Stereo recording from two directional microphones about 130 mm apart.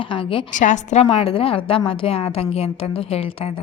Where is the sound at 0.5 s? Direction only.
75° left (ahead or behind).